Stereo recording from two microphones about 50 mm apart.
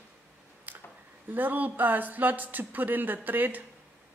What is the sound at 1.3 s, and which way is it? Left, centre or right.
Speech, right.